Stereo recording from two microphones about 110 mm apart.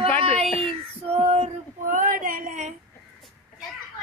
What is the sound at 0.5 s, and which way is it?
Female singing, 65° right (ahead or behind).